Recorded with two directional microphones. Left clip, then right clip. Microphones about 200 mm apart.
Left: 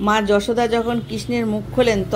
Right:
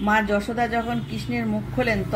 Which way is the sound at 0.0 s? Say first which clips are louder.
Left 4 dB; 45° left (ahead or behind).